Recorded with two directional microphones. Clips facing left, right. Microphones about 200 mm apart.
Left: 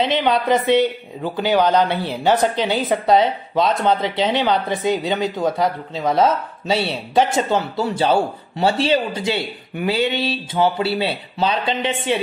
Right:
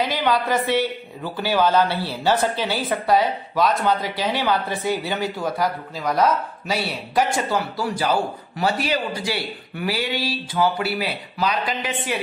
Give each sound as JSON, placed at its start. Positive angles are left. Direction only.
{"t": 0.0, "sound": "speech", "side_deg": 25}